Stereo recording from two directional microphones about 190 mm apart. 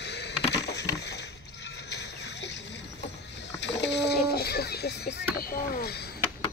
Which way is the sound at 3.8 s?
65° left (ahead or behind).